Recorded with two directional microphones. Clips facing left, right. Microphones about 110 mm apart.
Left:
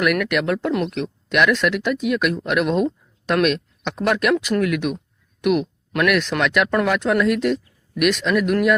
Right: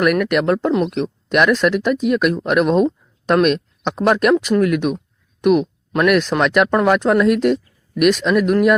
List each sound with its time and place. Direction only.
0.0 s speech: 40° right (ahead or behind)